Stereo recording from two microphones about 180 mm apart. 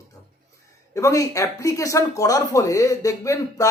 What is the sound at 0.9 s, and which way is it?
Speech, 20° left (ahead or behind).